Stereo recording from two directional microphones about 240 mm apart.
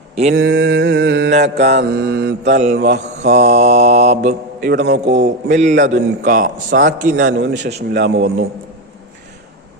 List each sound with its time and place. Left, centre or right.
0.3 s mantra: right
5.5 s a man's voice: right
7.8 s mantra: right